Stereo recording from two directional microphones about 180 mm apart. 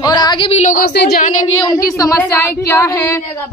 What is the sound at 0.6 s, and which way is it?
Speech, 55° left (ahead or behind).